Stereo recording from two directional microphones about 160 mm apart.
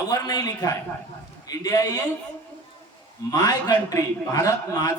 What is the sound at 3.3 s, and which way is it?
A man's voice, 25° left (ahead or behind).